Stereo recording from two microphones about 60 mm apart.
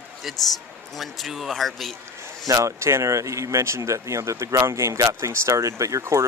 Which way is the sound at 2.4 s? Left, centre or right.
Right.